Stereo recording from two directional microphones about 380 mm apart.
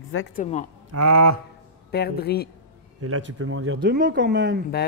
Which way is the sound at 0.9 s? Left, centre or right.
Right.